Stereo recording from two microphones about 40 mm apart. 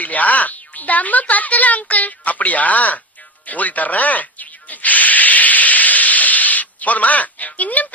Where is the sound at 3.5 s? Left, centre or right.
Left.